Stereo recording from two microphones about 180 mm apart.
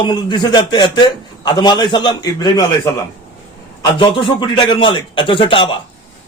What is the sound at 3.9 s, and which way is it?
A man's voice, 25° left (ahead or behind).